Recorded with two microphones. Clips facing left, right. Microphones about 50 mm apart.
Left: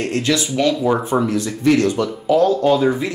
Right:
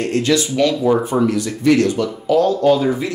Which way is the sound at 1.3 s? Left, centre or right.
Left.